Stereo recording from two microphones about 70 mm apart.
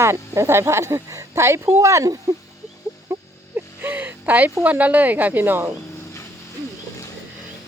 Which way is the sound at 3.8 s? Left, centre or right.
Right.